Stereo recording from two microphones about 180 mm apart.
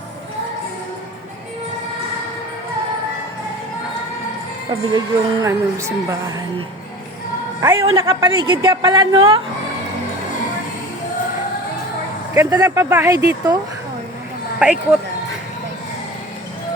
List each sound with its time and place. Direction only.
4.9 s speech: 20° right (ahead or behind)
7.6 s a woman's voice: 20° right (ahead or behind)
12.3 s speech: 20° right (ahead or behind)
14.6 s speech: 10° right (ahead or behind)